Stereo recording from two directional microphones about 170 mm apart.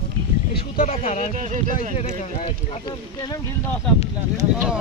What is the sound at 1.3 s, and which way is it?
Speech, 45° right (ahead or behind).